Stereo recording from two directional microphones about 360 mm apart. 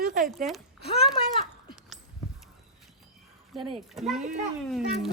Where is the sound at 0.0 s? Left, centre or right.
Right.